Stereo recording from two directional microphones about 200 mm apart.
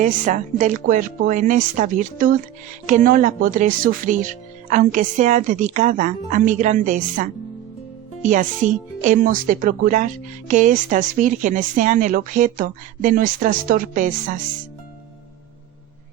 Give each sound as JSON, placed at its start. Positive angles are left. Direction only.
{"t": 0.0, "sound": "speech", "side_deg": -40}